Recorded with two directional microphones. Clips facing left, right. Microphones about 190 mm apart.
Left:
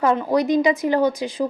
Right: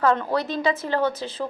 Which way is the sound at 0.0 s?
15° left (ahead or behind).